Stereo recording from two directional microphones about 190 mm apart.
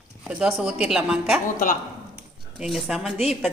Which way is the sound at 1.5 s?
45° left (ahead or behind).